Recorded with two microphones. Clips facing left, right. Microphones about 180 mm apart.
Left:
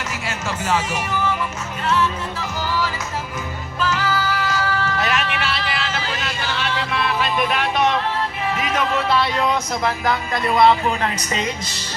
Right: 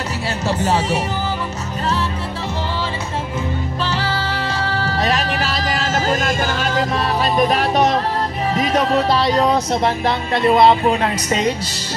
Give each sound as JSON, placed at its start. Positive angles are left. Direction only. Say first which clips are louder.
{"t": 0.5, "sound": "speech", "louder": "right 4 dB", "side_deg": -35}
{"t": 3.8, "sound": "music", "louder": "left 3 dB", "side_deg": -35}
{"t": 8.5, "sound": "speech", "louder": "right 6 dB", "side_deg": -35}